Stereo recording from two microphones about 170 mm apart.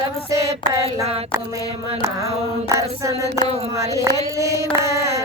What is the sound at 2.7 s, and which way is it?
Female singing, 20° right (ahead or behind).